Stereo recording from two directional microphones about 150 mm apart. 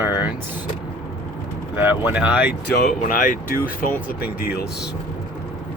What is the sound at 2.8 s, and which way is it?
Speech, 60° left (ahead or behind).